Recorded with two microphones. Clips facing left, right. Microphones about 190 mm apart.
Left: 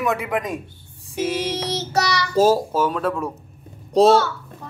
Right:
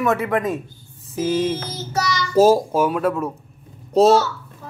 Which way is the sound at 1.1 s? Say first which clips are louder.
Right 3 dB; 80° left.